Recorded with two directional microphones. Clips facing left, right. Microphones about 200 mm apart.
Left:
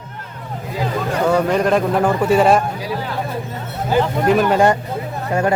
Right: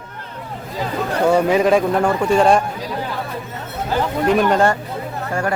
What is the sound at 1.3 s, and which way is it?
Speech, 10° right (ahead or behind).